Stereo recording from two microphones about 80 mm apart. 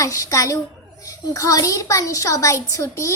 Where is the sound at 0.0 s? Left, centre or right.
Left.